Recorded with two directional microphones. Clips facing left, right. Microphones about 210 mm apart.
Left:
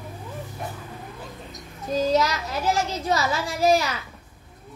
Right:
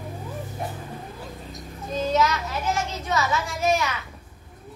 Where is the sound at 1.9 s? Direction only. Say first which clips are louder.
Left 1 dB; 35° left (ahead or behind).